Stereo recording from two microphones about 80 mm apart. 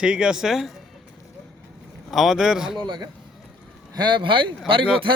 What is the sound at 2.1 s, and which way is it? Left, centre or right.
Speech, centre.